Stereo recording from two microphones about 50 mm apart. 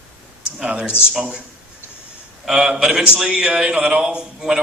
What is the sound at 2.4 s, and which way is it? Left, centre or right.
A man's voice, centre.